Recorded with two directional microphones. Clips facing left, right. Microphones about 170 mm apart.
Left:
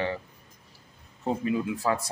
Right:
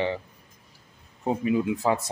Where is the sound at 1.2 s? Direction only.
20° right (ahead or behind).